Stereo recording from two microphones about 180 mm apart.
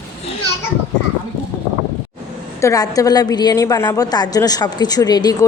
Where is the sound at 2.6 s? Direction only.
20° left (ahead or behind).